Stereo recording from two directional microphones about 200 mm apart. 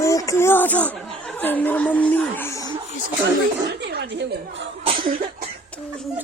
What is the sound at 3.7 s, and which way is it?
Chuckle, 55° right (ahead or behind).